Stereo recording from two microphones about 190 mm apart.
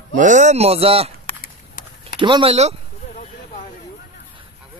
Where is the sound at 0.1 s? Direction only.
40° right (ahead or behind).